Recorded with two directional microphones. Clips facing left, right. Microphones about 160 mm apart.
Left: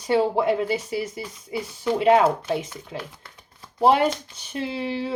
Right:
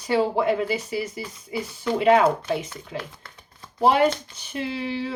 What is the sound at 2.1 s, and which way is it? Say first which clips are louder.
Speech: even; 5° left (ahead or behind).